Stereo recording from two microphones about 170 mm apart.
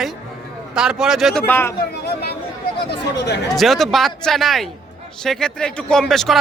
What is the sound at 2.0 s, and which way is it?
Speech, 70° left (ahead or behind).